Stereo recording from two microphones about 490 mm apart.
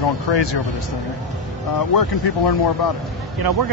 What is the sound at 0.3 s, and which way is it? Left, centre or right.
Speech, left.